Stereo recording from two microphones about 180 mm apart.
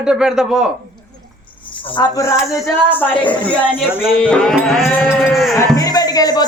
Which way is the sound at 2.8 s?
10° left (ahead or behind).